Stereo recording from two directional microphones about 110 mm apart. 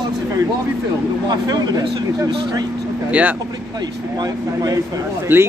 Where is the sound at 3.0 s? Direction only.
10° right (ahead or behind).